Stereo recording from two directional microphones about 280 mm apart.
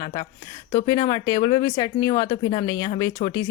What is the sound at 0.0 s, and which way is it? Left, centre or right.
A woman's voice, centre.